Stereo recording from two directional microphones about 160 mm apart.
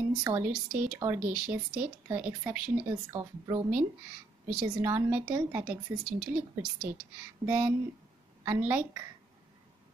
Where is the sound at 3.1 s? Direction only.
25° right (ahead or behind).